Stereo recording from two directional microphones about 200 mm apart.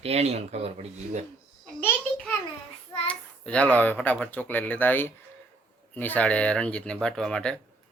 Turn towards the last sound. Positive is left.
turn(degrees=5)  # may be behind; listen again after turning